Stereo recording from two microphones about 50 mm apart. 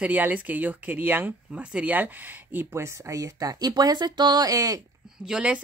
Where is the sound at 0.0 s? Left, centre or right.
Right.